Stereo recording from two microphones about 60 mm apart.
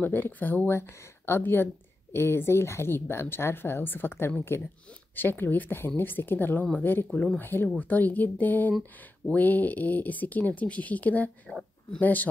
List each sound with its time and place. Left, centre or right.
0.0 s speech: left
6.6 s speech: left
7.3 s speech: left